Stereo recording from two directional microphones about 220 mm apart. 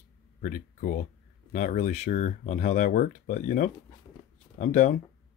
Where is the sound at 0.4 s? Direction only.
35° left (ahead or behind).